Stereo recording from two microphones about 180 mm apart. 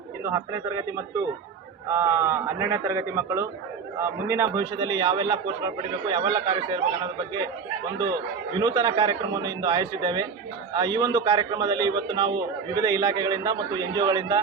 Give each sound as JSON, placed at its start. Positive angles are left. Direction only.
{"t": 0.3, "sound": "a man's voice", "side_deg": -15}